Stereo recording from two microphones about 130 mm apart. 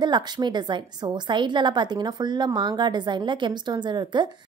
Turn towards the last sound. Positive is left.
turn(degrees=-35)  # may be behind; listen again after turning